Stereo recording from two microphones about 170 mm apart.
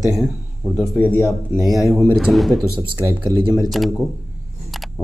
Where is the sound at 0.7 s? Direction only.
10° left (ahead or behind).